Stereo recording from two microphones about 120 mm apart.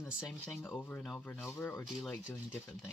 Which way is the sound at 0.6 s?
15° left (ahead or behind).